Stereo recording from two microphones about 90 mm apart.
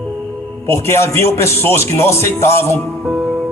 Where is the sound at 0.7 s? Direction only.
30° left (ahead or behind).